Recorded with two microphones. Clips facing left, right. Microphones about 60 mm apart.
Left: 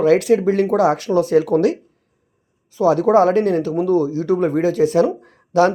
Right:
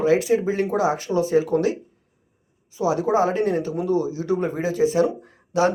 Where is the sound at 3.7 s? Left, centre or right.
Left.